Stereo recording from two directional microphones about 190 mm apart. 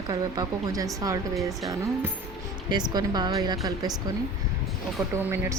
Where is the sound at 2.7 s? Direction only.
20° right (ahead or behind).